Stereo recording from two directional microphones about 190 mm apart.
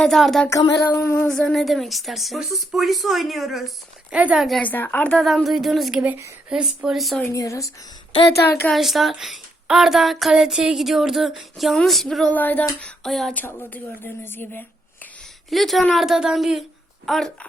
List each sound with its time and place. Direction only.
0.0 s speech: centre (ahead or behind)
0.5 s a sound: 20° left (ahead or behind)
1.3 s speech: 5° left (ahead or behind)
7.3 s a sound: 15° left (ahead or behind)
8.3 s a woman's voice: 55° left (ahead or behind)
8.6 s speech: centre (ahead or behind)
15.4 s speech: centre (ahead or behind)